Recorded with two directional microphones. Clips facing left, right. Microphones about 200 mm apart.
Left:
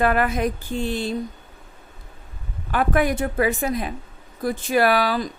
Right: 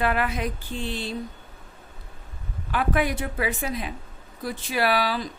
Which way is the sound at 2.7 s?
45° left (ahead or behind).